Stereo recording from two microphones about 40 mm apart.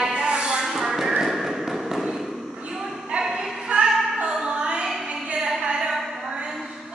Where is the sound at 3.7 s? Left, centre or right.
Right.